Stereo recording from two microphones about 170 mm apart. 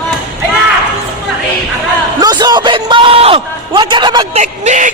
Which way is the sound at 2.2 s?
25° right (ahead or behind).